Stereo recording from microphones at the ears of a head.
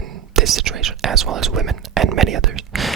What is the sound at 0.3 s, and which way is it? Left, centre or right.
Speech, right.